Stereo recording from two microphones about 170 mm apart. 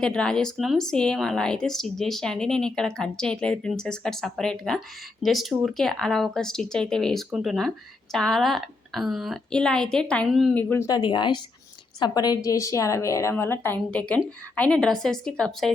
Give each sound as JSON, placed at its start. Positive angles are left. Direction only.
{"t": 0.0, "sound": "a woman's voice", "side_deg": 5}